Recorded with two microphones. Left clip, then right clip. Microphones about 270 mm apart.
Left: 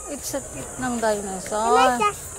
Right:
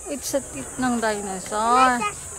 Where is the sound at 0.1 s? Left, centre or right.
Centre.